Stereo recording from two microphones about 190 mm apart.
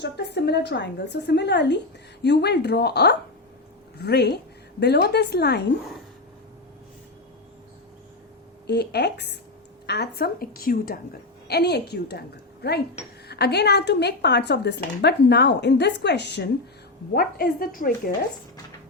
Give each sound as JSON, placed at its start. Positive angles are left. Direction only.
{"t": 0.0, "sound": "a woman's voice", "side_deg": 65}
{"t": 8.6, "sound": "a woman's voice", "side_deg": 60}
{"t": 13.2, "sound": "a woman's voice", "side_deg": 60}